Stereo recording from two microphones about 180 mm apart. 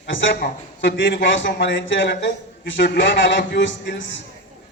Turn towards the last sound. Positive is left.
turn(degrees=90)